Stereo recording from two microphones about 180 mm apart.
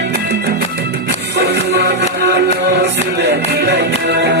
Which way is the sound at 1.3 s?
65° right (ahead or behind).